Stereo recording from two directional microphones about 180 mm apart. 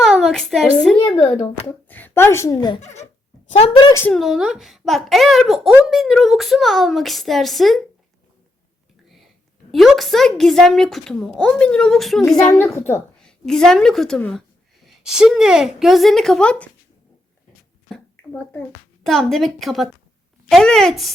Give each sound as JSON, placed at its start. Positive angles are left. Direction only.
{"t": 0.0, "sound": "a woman's voice", "side_deg": 0}
{"t": 1.0, "sound": "a woman's voice", "side_deg": 20}
{"t": 2.8, "sound": "speech", "side_deg": 40}
{"t": 4.1, "sound": "speech", "side_deg": 0}
{"t": 9.7, "sound": "speech", "side_deg": 0}
{"t": 17.8, "sound": "a sound", "side_deg": 5}
{"t": 19.0, "sound": "speech", "side_deg": 0}